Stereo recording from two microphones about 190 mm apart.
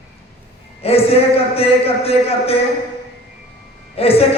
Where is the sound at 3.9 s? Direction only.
30° left (ahead or behind).